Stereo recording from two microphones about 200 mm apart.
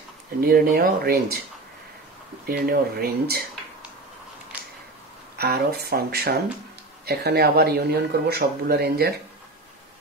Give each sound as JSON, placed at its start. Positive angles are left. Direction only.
{"t": 0.4, "sound": "speech", "side_deg": -50}
{"t": 2.4, "sound": "speech", "side_deg": -50}
{"t": 4.5, "sound": "a sound", "side_deg": -5}
{"t": 5.4, "sound": "speech", "side_deg": -55}